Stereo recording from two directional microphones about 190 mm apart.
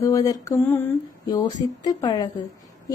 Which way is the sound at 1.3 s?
20° left (ahead or behind).